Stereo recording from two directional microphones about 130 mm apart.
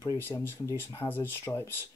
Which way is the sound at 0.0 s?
25° left (ahead or behind).